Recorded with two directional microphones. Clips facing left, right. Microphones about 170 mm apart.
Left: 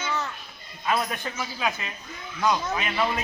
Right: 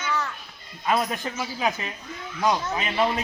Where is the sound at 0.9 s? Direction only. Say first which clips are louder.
Right 2 dB; 25° right (ahead or behind).